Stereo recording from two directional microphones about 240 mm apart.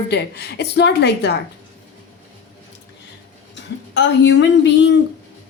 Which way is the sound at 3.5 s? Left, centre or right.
Left.